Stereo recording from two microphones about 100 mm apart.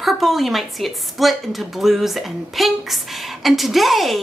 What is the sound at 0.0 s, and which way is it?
Speech, centre (ahead or behind).